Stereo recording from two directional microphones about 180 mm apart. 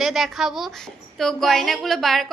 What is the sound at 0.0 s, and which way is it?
A woman's voice, centre (ahead or behind).